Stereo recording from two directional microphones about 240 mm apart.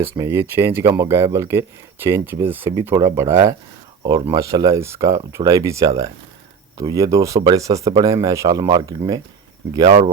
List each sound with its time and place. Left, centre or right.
0.2 s speech: centre